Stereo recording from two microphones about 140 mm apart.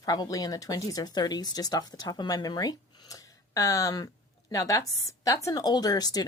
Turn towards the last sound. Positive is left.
turn(degrees=30)  # may be behind; listen again after turning